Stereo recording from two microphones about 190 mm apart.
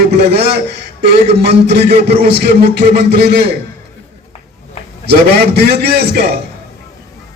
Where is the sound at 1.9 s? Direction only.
30° right (ahead or behind).